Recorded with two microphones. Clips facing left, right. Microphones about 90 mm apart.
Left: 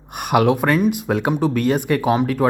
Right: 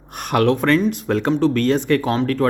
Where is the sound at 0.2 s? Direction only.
10° left (ahead or behind).